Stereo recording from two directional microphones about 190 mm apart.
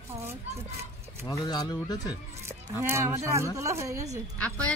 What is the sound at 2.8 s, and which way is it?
Speech, 15° right (ahead or behind).